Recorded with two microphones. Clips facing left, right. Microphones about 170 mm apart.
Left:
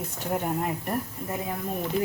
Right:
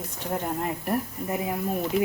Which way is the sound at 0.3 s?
Centre (ahead or behind).